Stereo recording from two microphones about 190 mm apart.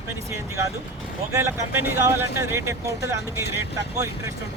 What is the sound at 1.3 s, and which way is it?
Speech, 15° right (ahead or behind).